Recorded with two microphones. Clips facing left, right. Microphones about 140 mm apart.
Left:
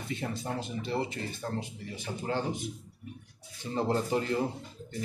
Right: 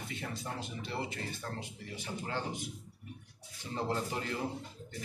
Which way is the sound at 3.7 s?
30° left (ahead or behind).